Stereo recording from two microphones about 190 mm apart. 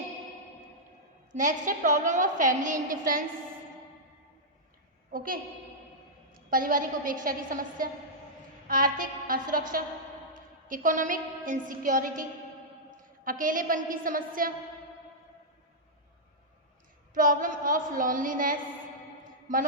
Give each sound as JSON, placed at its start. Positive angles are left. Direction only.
{"t": 1.4, "sound": "a woman's voice", "side_deg": -40}
{"t": 5.1, "sound": "a woman's voice", "side_deg": -50}
{"t": 13.2, "sound": "a woman's voice", "side_deg": -45}
{"t": 17.2, "sound": "a woman's voice", "side_deg": -45}